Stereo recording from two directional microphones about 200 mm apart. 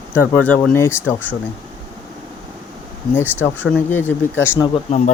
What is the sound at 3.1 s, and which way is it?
Speech, 10° left (ahead or behind).